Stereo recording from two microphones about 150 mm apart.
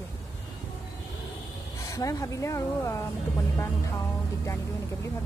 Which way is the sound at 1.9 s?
20° left (ahead or behind).